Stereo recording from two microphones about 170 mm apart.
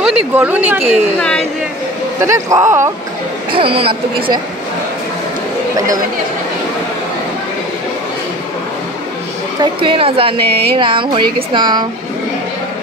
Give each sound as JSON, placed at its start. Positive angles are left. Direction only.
{"t": 0.0, "sound": "speech", "side_deg": -10}
{"t": 2.2, "sound": "speech", "side_deg": -15}
{"t": 3.5, "sound": "a woman's voice", "side_deg": -35}
{"t": 9.6, "sound": "a woman's voice", "side_deg": -30}